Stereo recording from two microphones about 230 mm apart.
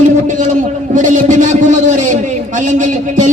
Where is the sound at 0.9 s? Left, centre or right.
Right.